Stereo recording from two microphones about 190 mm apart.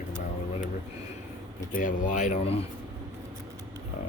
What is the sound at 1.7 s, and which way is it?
Speech, 45° left (ahead or behind).